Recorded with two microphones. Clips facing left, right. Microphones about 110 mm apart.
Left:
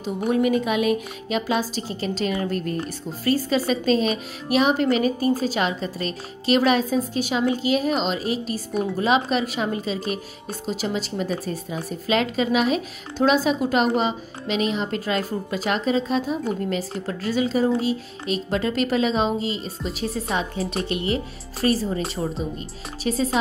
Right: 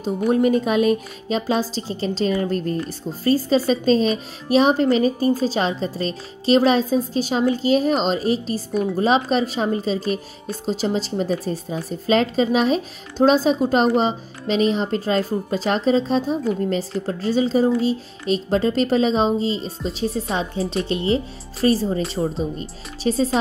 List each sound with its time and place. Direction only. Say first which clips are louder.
0.3 s a woman's voice: right 3 dB; 35° right (ahead or behind)
23.0 s a woman's voice: right 4 dB; 35° right (ahead or behind)